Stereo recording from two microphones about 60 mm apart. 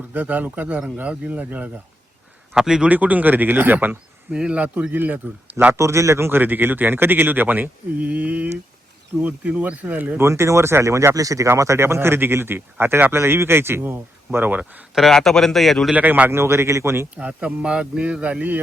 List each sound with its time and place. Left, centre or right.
0.1 s a man's voice: right
2.6 s a man's voice: centre
2.9 s speech: right
4.3 s a man's voice: centre
5.7 s speech: right
6.4 s a man's voice: right
10.2 s speech: right
11.4 s a man's voice: right
15.1 s speech: centre
16.0 s a man's voice: right
16.3 s speech: right
17.2 s a man's voice: right